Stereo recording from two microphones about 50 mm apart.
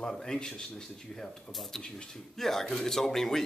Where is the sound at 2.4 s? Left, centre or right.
Centre.